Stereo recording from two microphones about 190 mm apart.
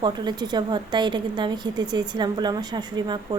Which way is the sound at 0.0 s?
25° right (ahead or behind).